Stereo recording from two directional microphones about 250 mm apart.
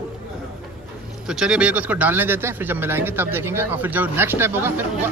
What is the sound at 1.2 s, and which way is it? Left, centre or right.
A man's voice, centre.